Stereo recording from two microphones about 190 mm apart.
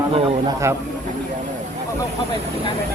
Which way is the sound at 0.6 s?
15° right (ahead or behind).